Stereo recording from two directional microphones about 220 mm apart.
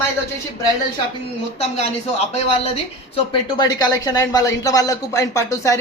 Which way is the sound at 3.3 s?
20° left (ahead or behind).